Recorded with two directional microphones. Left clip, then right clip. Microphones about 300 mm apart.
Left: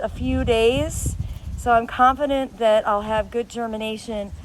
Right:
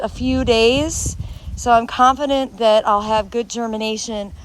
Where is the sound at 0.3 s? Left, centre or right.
Centre.